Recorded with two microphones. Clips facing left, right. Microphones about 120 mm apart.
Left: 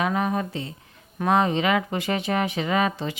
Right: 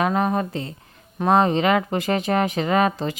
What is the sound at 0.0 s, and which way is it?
Speech, 40° right (ahead or behind).